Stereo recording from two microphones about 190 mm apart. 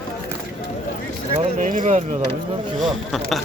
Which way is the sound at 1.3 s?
45° right (ahead or behind).